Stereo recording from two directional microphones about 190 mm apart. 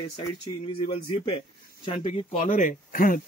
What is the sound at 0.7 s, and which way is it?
Speech, 25° left (ahead or behind).